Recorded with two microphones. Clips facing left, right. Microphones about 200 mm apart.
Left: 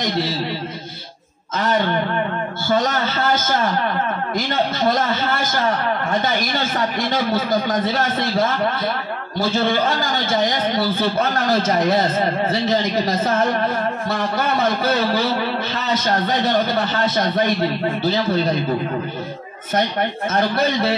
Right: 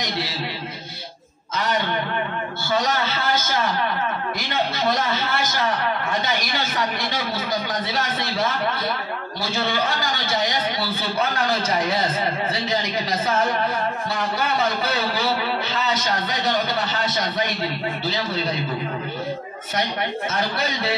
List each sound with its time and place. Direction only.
2.7 s a man's voice: 50° left (ahead or behind)
20.2 s a man's voice: 50° left (ahead or behind)